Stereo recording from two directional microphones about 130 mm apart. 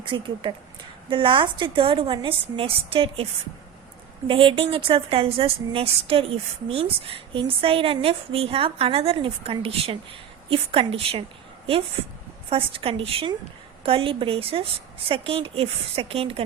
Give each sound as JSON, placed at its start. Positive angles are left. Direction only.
{"t": 0.0, "sound": "a woman's voice", "side_deg": -40}
{"t": 4.3, "sound": "a woman's voice", "side_deg": -45}